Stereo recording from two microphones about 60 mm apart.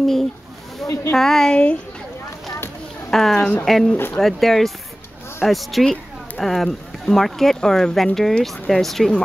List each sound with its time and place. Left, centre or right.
0.8 s a sound: centre
1.1 s a woman's voice: centre
3.1 s speech: centre
3.9 s speech: left
4.2 s speech: centre